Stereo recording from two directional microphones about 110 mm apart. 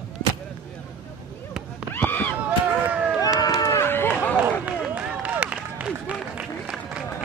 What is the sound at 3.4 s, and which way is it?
Run, 35° left (ahead or behind).